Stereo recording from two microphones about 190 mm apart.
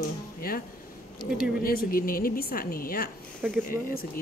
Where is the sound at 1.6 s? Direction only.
50° left (ahead or behind).